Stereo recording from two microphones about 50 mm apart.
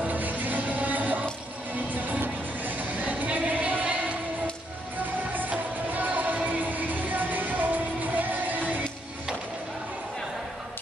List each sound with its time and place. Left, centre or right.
0.0 s music: right
5.3 s music: right